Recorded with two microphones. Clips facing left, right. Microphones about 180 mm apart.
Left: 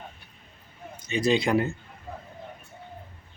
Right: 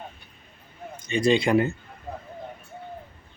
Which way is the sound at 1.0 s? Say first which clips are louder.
Right 2 dB; 5° left (ahead or behind).